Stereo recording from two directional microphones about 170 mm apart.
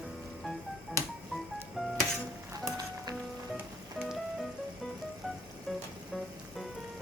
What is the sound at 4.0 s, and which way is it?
Music, centre (ahead or behind).